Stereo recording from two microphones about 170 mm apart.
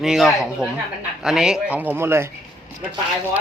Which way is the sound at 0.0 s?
Centre (ahead or behind).